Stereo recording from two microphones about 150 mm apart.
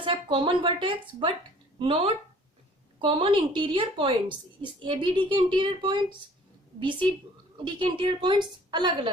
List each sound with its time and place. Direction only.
0.0 s a woman's voice: 35° right (ahead or behind)